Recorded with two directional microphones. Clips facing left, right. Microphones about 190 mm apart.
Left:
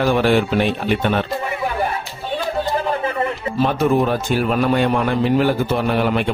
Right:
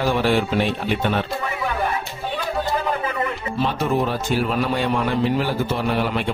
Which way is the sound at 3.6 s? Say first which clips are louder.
Left 5 dB; 50° left (ahead or behind).